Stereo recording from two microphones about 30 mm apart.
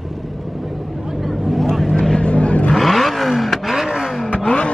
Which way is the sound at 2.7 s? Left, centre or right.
Centre.